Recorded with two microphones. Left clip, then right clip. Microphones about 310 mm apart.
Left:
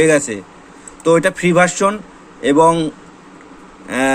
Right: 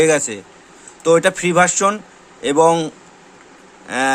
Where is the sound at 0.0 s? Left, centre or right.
Centre.